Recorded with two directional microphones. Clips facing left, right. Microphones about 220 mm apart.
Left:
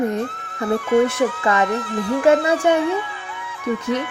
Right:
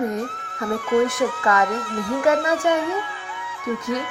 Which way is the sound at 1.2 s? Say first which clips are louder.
Left 2 dB; 25° left (ahead or behind).